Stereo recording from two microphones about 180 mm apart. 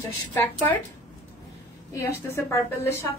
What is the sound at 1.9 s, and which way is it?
A woman's voice, 15° left (ahead or behind).